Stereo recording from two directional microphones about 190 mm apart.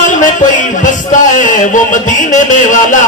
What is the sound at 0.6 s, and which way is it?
A man's voice, 40° left (ahead or behind).